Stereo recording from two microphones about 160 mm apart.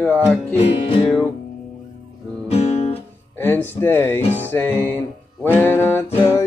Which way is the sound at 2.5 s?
40° left (ahead or behind).